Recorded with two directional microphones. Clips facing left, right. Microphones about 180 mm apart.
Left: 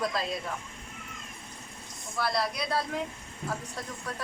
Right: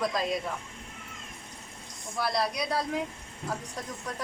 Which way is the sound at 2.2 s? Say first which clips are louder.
Right 1 dB; 15° right (ahead or behind).